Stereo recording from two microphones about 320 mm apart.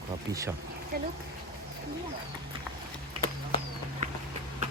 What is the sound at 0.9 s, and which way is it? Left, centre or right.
Speech, right.